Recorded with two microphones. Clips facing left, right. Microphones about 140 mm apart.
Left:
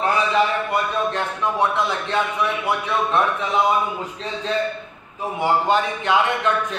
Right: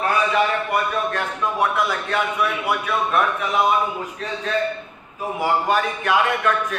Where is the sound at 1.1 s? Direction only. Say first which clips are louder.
Left 1 dB; 25° left (ahead or behind).